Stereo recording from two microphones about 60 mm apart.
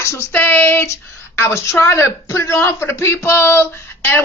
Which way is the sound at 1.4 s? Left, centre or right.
Left.